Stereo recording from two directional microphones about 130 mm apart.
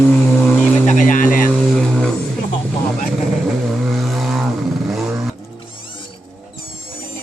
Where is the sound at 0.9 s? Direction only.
80° left.